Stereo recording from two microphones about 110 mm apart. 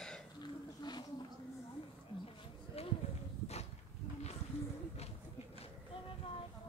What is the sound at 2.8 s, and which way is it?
Run, 65° left (ahead or behind).